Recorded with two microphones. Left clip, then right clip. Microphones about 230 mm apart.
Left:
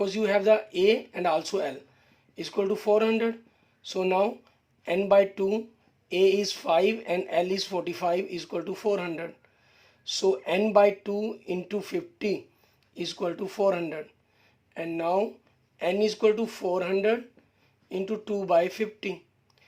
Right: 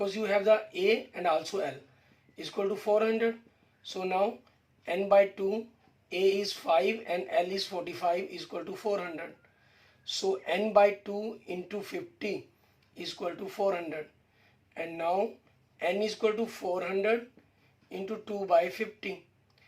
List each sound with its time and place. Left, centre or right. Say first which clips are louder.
0.0 s speech: left 4 dB; left